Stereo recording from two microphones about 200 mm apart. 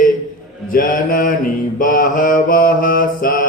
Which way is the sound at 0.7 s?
45° left (ahead or behind).